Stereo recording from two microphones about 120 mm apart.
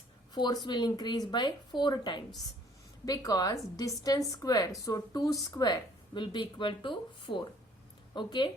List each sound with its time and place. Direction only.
0.3 s a woman's voice: 40° left (ahead or behind)